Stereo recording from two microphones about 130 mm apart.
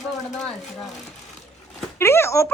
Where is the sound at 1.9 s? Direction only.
20° left (ahead or behind).